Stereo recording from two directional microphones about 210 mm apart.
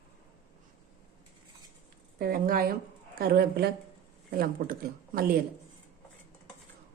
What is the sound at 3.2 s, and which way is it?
Speech, 45° right (ahead or behind).